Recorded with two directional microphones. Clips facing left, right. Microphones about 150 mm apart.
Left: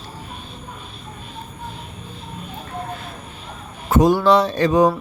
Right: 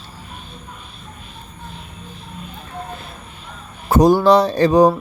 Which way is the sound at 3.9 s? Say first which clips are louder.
Right 3 dB; 35° right (ahead or behind).